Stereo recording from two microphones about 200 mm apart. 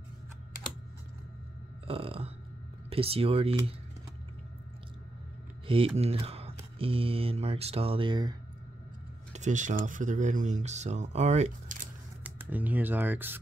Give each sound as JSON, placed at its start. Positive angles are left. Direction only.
{"t": 1.9, "sound": "speech", "side_deg": -30}
{"t": 5.9, "sound": "speech", "side_deg": -30}
{"t": 9.3, "sound": "speech", "side_deg": -40}
{"t": 12.2, "sound": "speech", "side_deg": -10}